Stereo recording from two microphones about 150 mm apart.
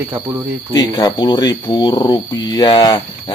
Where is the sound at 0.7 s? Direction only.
25° left (ahead or behind).